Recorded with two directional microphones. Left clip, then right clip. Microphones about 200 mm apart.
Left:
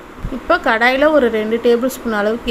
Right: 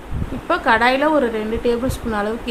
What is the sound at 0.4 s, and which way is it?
A woman's voice, 10° left (ahead or behind).